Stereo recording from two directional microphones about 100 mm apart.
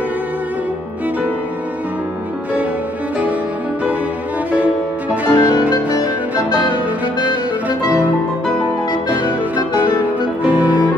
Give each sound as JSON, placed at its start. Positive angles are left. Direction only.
{"t": 5.3, "sound": "music", "side_deg": 45}
{"t": 10.4, "sound": "music", "side_deg": -15}